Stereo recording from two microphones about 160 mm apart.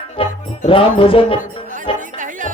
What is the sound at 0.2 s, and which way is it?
Music, 35° left (ahead or behind).